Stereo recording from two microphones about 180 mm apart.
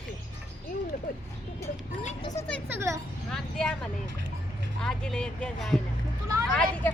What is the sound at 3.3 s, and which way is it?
Speech, 5° left (ahead or behind).